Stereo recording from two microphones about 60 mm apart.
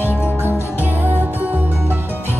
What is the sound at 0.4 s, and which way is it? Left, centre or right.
Music, right.